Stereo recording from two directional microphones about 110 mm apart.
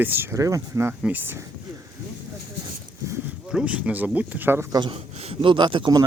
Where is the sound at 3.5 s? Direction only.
10° right (ahead or behind).